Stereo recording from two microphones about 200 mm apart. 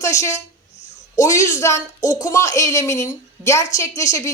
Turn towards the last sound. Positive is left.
turn(degrees=15)  # may be behind; listen again after turning